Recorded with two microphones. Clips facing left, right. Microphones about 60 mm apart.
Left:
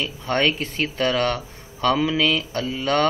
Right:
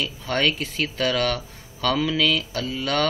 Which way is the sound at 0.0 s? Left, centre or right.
Left.